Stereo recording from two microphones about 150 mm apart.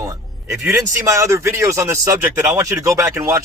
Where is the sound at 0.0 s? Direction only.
20° right (ahead or behind).